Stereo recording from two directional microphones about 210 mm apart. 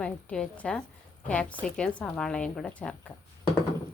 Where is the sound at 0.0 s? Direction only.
5° left (ahead or behind).